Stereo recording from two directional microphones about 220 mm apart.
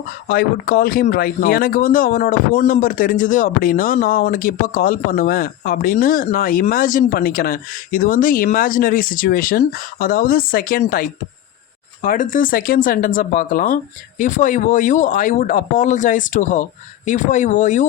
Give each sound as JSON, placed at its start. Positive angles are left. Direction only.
{"t": 0.3, "sound": "a man's voice", "side_deg": 40}